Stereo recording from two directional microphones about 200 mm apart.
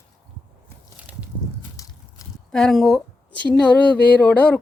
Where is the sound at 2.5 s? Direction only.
Centre (ahead or behind).